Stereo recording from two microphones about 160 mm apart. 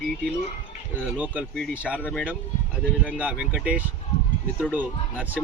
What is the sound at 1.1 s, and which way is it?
Speech, 10° right (ahead or behind).